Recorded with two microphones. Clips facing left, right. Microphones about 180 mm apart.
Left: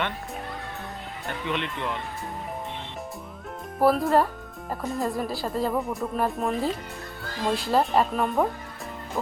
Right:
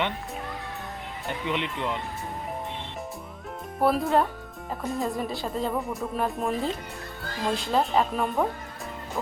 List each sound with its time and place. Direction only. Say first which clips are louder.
1.3 s speech: even; 15° right (ahead or behind)
3.8 s speech: left 2 dB; centre (ahead or behind)